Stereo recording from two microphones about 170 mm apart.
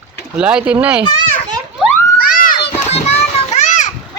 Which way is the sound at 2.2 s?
55° left (ahead or behind).